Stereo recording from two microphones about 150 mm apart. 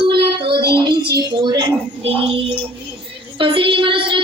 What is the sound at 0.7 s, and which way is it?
Music, 30° right (ahead or behind).